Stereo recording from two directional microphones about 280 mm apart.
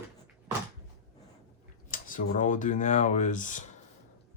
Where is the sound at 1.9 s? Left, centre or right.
Left.